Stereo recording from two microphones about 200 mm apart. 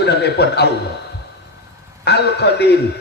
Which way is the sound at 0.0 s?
55° left (ahead or behind).